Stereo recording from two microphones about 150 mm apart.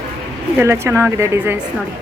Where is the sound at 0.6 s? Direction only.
15° right (ahead or behind).